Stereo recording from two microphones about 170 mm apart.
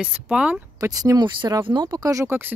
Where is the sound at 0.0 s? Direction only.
5° right (ahead or behind).